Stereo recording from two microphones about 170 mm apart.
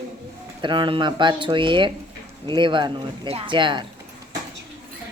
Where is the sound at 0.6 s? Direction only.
30° right (ahead or behind).